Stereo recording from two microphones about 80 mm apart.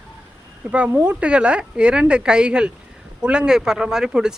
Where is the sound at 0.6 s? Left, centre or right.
Centre.